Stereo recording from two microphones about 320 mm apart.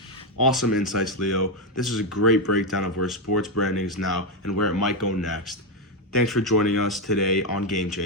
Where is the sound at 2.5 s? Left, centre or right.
Left.